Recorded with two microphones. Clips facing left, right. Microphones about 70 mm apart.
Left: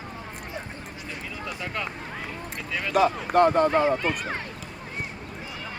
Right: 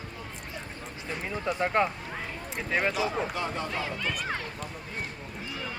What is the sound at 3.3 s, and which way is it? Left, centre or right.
Speech, left.